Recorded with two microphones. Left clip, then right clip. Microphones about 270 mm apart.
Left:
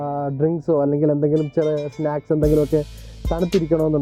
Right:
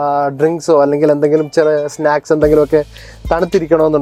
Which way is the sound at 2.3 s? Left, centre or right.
Centre.